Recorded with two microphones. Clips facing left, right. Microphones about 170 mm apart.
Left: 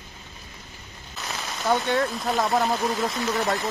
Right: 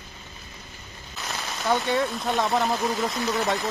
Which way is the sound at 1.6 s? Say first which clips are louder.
Left 1 dB; centre (ahead or behind).